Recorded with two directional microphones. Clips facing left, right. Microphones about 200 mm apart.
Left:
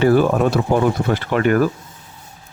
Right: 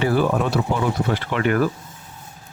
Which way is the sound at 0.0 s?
50° left (ahead or behind).